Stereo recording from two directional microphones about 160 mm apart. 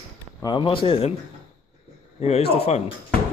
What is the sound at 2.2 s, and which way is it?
Speech, 40° left (ahead or behind).